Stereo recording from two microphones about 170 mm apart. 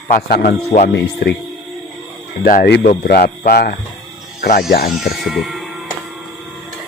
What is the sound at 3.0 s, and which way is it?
Speech, 65° left (ahead or behind).